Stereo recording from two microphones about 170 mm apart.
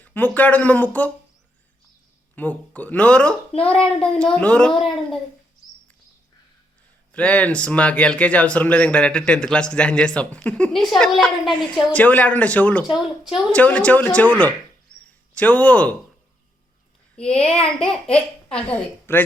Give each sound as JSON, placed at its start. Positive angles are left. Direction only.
{"t": 0.0, "sound": "speech", "side_deg": 10}
{"t": 2.3, "sound": "a child's voice", "side_deg": 10}
{"t": 7.1, "sound": "speech", "side_deg": 10}
{"t": 17.2, "sound": "child singing", "side_deg": 35}
{"t": 18.5, "sound": "speech", "side_deg": 10}